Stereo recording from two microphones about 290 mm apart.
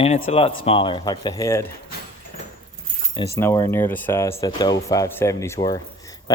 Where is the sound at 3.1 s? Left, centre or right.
Centre.